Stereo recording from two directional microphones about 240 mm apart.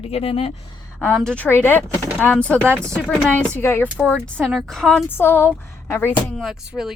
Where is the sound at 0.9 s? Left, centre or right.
Centre.